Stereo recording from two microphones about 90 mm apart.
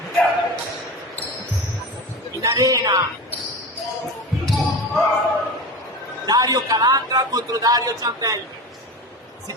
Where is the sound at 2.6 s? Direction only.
45° right (ahead or behind).